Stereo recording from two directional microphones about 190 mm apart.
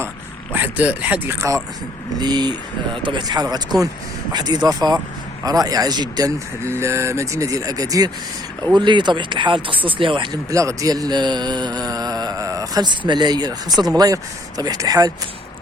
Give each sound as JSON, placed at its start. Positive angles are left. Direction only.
{"t": 0.5, "sound": "speech", "side_deg": -10}